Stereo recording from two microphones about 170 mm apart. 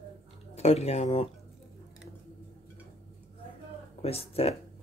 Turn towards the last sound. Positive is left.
turn(degrees=35)  # may be behind; listen again after turning